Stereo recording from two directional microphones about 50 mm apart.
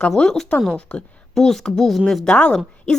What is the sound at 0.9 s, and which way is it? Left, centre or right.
Speech, left.